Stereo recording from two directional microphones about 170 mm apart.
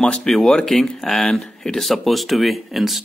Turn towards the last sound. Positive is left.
turn(degrees=0)  # may be behind; listen again after turning